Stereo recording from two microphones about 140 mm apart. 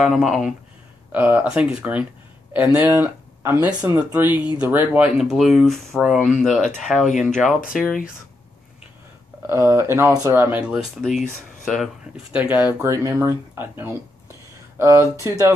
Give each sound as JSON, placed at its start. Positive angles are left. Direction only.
{"t": 0.0, "sound": "speech", "side_deg": 0}
{"t": 1.1, "sound": "speech", "side_deg": -10}
{"t": 9.5, "sound": "speech", "side_deg": -20}
{"t": 11.0, "sound": "speech", "side_deg": 0}